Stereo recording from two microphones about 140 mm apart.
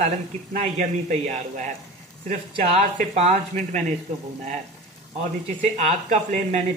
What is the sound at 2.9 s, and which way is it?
Speech, 55° right (ahead or behind).